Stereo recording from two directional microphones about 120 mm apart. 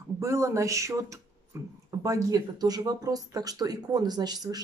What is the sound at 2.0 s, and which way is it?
Speech, 30° right (ahead or behind).